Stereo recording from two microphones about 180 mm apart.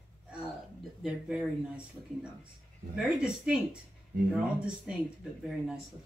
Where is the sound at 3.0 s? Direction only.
5° right (ahead or behind).